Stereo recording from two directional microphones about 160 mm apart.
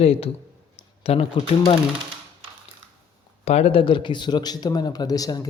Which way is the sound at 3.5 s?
40° left (ahead or behind).